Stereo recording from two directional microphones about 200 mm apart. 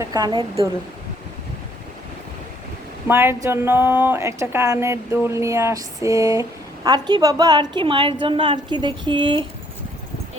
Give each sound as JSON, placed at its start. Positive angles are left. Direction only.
{"t": 0.0, "sound": "a woman's voice", "side_deg": -20}
{"t": 3.1, "sound": "a woman's voice", "side_deg": -10}